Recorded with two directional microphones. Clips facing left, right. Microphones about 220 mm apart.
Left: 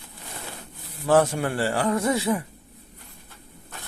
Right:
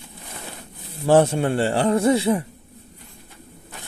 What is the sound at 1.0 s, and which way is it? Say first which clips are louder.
Speech: right 4 dB; 25° right (ahead or behind).